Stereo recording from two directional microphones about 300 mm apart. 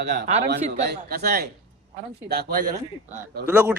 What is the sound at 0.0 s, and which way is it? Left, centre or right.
Speech, right.